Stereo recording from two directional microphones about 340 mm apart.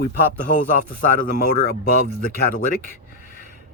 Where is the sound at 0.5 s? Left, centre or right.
Left.